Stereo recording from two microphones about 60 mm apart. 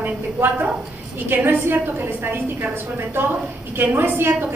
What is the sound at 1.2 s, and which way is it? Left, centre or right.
A woman's voice, right.